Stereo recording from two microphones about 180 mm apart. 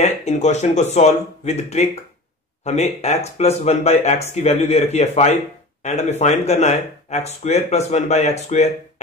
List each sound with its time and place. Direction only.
0.0 s speech: 40° left (ahead or behind)